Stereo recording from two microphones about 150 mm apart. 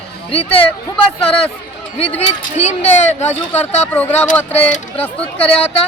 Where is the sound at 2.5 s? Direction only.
45° left (ahead or behind).